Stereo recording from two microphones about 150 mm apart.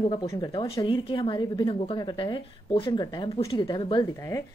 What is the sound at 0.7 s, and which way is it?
Speech, 35° left (ahead or behind).